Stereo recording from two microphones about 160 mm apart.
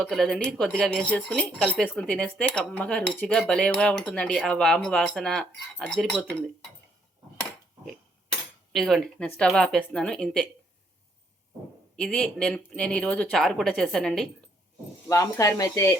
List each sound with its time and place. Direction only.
0.0 s speech: centre (ahead or behind)
8.7 s speech: centre (ahead or behind)
11.9 s speech: 5° left (ahead or behind)
15.0 s speech: 20° left (ahead or behind)